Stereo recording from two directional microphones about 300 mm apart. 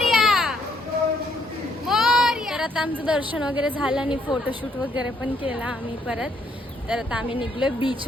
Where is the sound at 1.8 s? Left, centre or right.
Centre.